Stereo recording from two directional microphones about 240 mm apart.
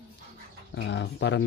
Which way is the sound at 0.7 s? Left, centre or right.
Left.